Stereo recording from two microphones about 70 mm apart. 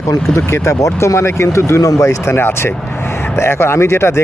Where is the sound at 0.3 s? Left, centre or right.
Left.